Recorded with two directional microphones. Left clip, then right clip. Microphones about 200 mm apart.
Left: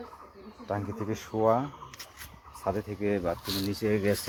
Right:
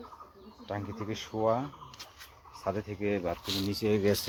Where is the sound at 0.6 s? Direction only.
5° left (ahead or behind).